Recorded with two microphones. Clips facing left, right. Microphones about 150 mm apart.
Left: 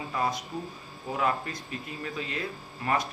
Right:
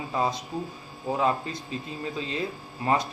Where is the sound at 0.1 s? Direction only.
25° right (ahead or behind).